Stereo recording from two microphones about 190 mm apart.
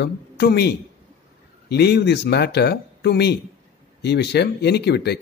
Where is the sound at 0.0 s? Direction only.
60° left (ahead or behind).